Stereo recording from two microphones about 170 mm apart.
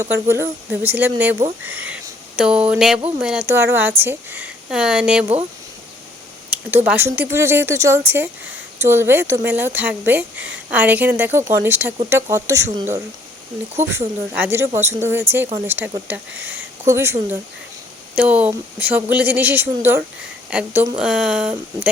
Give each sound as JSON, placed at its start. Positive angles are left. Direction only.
{"t": 0.0, "sound": "speech", "side_deg": -15}
{"t": 6.5, "sound": "speech", "side_deg": -10}
{"t": 14.3, "sound": "speech", "side_deg": -15}